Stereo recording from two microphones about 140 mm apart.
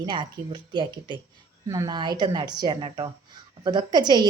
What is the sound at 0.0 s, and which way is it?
Speech, 30° right (ahead or behind).